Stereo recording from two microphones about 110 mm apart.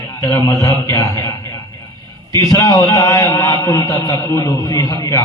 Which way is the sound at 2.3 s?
30° left (ahead or behind).